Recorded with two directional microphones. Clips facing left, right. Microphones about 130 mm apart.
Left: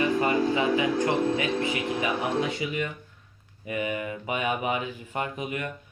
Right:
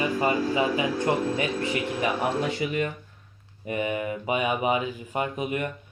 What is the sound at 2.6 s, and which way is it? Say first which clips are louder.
Speech: right 3 dB; 50° right (ahead or behind).